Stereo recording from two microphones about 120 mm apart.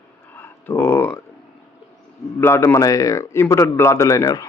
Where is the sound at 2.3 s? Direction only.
20° left (ahead or behind).